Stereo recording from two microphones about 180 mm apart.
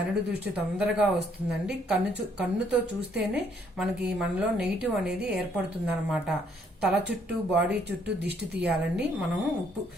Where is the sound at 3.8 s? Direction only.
5° right (ahead or behind).